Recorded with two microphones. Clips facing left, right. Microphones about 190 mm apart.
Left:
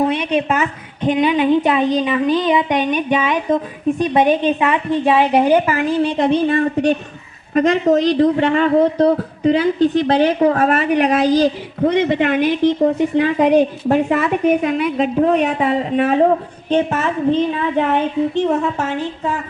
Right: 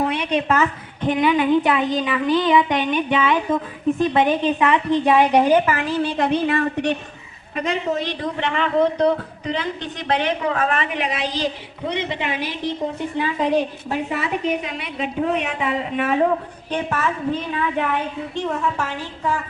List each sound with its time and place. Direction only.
0.0 s a woman's voice: 20° left (ahead or behind)
7.5 s a woman's voice: 45° left (ahead or behind)
16.6 s a woman's voice: 25° left (ahead or behind)